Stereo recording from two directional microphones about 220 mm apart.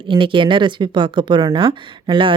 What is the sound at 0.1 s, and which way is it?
Speech, 20° right (ahead or behind).